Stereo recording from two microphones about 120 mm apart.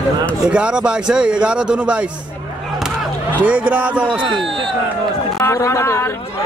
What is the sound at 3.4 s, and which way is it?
Speech, 10° right (ahead or behind).